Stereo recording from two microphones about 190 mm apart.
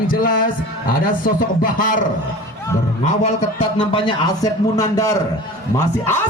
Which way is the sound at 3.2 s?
30° left (ahead or behind).